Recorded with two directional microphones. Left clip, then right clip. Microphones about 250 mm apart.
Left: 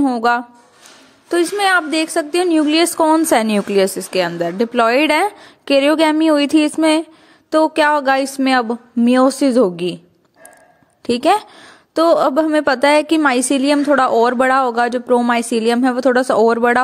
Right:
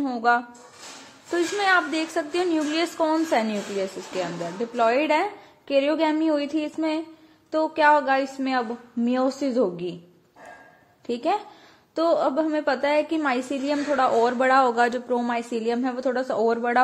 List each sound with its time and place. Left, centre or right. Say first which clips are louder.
0.0 s a woman's voice: left 6 dB; left
11.1 s a woman's voice: left 11 dB; left